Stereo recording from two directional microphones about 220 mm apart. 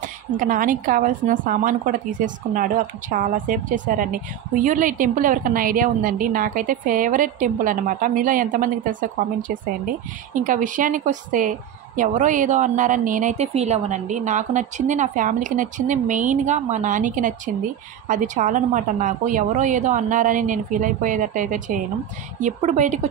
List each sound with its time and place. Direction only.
0.4 s a woman's voice: 40° right (ahead or behind)
10.3 s a woman's voice: 35° right (ahead or behind)